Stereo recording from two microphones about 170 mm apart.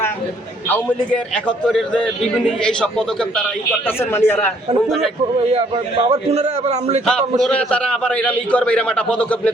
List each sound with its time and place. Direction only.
0.7 s a man's voice: 10° left (ahead or behind)
6.3 s a man's voice: 40° right (ahead or behind)
7.4 s a man's voice: 5° left (ahead or behind)